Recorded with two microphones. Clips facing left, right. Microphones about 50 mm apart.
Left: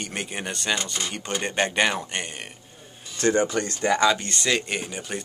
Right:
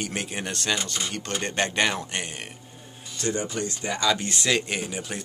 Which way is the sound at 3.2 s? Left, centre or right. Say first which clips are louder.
Left 7 dB; left.